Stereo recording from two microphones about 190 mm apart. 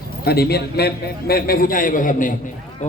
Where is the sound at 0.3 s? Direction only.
55° left (ahead or behind).